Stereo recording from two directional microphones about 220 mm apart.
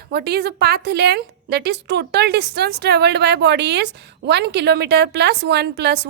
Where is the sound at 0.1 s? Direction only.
45° right (ahead or behind).